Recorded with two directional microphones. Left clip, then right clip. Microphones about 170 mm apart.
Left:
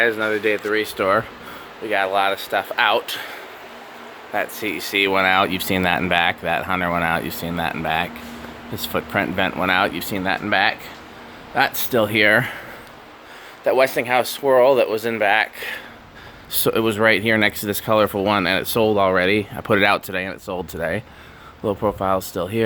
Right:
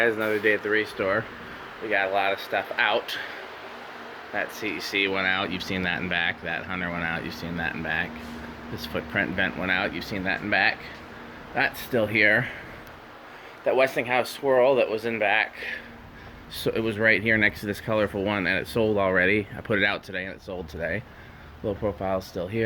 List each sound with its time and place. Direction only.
0.0 s speech: 5° left (ahead or behind)
0.3 s speech: 20° left (ahead or behind); by 3.3 s 35° left (ahead or behind)
4.4 s speech: 35° left (ahead or behind)
13.7 s speech: 35° left (ahead or behind)